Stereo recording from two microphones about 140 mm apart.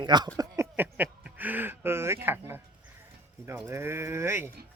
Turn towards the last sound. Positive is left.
turn(degrees=-20)  # may be behind; listen again after turning